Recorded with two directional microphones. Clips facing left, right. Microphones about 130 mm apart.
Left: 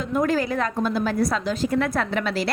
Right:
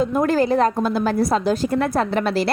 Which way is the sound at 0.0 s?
35° right (ahead or behind).